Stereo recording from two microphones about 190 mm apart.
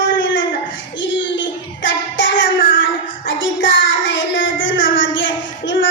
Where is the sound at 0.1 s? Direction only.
80° left.